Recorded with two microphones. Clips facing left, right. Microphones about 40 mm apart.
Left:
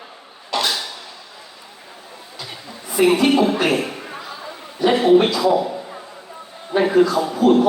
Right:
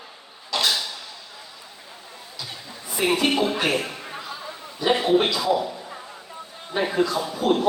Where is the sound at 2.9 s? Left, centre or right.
Left.